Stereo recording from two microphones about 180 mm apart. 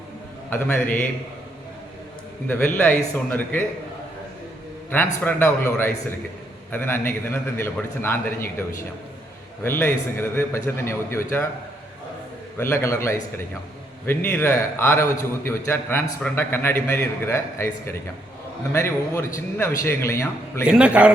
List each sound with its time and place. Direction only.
0.5 s a man's voice: 10° left (ahead or behind)
2.5 s a man's voice: 10° left (ahead or behind)
4.9 s a man's voice: 10° left (ahead or behind)
9.6 s a man's voice: 10° left (ahead or behind)
12.5 s a man's voice: 15° left (ahead or behind)
20.7 s a man's voice: 5° right (ahead or behind)